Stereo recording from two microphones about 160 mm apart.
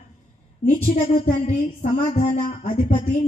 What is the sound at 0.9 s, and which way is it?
A woman's voice, 40° left (ahead or behind).